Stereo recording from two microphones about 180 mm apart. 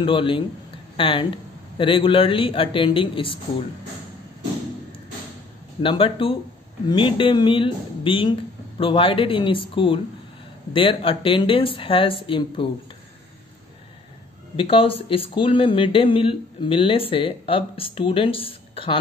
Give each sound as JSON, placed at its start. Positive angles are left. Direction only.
{"t": 0.0, "sound": "speech", "side_deg": 30}
{"t": 5.8, "sound": "speech", "side_deg": 30}
{"t": 14.6, "sound": "speech", "side_deg": 30}